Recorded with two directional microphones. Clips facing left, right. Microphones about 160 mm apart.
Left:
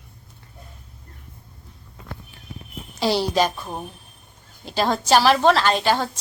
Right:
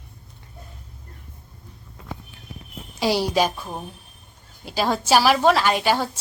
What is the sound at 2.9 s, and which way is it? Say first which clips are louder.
A woman's voice: even; 10° right (ahead or behind).